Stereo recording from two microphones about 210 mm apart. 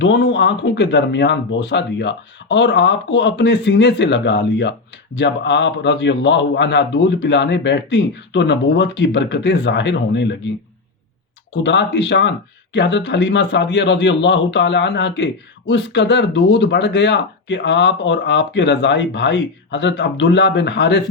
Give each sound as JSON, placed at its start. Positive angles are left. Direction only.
{"t": 0.0, "sound": "a man's voice", "side_deg": 60}
{"t": 11.5, "sound": "a man's voice", "side_deg": 60}